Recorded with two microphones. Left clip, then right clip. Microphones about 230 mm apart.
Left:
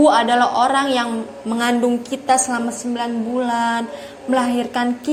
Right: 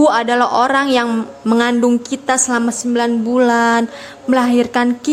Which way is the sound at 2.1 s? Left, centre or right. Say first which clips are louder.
Right 1 dB; right.